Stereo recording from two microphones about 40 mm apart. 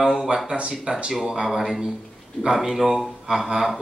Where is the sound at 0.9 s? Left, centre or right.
Right.